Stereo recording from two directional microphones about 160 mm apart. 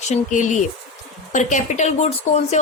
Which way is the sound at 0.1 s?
50° left (ahead or behind).